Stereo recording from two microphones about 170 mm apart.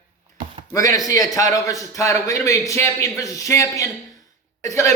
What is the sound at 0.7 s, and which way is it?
A man's voice, 20° left (ahead or behind).